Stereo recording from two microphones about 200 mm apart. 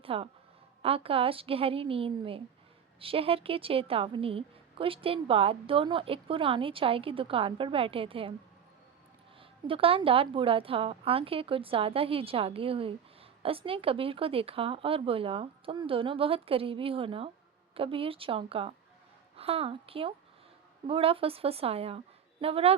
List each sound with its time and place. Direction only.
0.0 s a woman's voice: 30° right (ahead or behind)
9.4 s a woman's voice: 25° right (ahead or behind)